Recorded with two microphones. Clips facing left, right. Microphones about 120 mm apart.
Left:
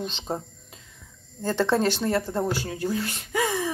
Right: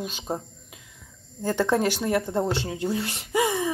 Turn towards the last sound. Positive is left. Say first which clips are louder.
# right 2 dB
turn(degrees=-20)  # may be behind; listen again after turning